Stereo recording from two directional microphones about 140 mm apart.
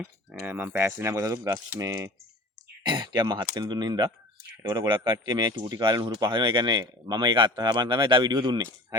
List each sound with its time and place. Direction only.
0.4 s speech: 15° right (ahead or behind)